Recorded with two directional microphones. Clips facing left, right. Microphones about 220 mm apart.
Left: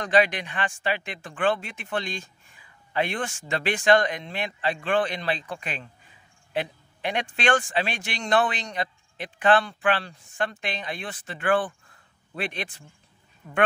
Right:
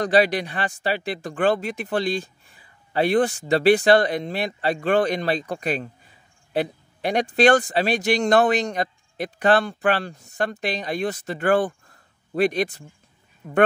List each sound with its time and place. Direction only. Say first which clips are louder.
0.0 s speech: right 4 dB; 35° right (ahead or behind)